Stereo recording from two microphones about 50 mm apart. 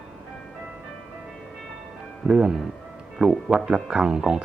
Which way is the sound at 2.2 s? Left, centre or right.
Centre.